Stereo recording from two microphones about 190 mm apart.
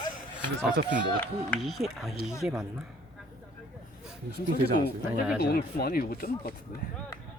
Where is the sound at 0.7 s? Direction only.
65° right (ahead or behind).